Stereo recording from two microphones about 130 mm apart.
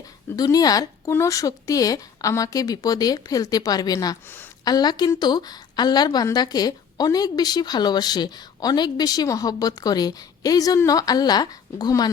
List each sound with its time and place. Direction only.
0.3 s a woman's voice: 30° left (ahead or behind)